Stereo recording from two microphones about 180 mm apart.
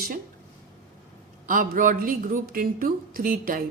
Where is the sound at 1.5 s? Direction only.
50° right (ahead or behind).